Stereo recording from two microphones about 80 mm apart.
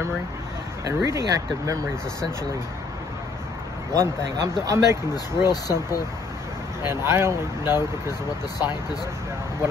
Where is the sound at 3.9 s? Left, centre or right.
Right.